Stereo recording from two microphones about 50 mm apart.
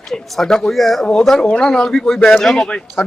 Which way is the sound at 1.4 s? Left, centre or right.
Centre.